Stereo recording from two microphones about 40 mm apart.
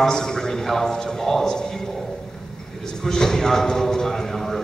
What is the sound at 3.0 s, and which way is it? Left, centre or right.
A man's voice, centre.